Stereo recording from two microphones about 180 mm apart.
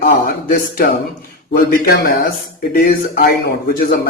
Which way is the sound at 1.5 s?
55° left (ahead or behind).